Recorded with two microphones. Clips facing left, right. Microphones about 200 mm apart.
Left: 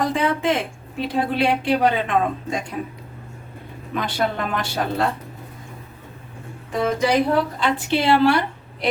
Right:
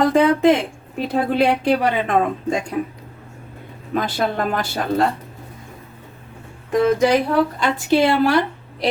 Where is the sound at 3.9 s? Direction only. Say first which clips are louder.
Right 3 dB; 40° right (ahead or behind).